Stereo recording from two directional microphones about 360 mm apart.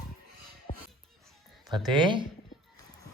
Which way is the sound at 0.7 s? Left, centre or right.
Centre.